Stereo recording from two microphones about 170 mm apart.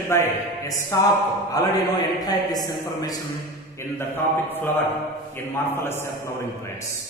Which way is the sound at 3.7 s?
10° left (ahead or behind).